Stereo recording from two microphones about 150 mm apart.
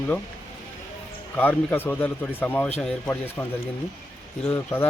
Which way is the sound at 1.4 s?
10° left (ahead or behind).